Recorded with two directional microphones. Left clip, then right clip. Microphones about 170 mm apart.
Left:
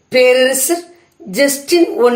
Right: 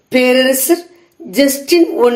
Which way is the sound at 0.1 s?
30° right (ahead or behind).